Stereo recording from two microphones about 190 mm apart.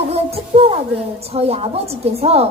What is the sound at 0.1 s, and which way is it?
A child's voice, 30° right (ahead or behind).